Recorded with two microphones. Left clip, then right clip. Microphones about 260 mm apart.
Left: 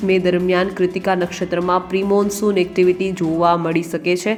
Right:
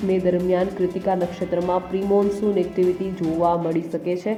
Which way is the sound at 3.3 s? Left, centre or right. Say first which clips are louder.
Left 5 dB; left.